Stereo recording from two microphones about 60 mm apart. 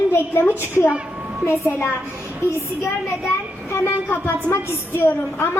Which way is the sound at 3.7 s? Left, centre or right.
Left.